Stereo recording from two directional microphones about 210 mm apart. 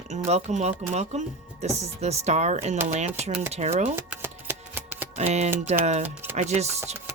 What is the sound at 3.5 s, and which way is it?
Speech, 30° right (ahead or behind).